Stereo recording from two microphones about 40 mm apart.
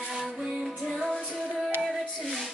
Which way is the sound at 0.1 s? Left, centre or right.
Centre.